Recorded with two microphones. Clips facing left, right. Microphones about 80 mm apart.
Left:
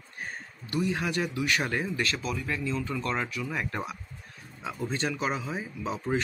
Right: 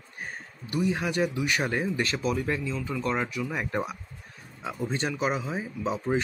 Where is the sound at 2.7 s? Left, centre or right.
Centre.